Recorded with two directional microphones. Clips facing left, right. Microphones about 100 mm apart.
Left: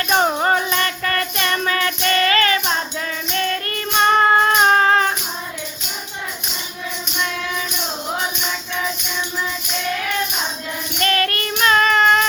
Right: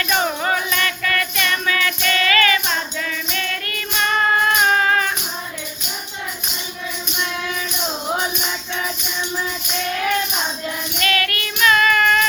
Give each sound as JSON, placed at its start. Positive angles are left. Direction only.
{"t": 0.0, "sound": "music", "side_deg": 35}
{"t": 11.0, "sound": "music", "side_deg": 35}
{"t": 11.6, "sound": "child singing", "side_deg": 30}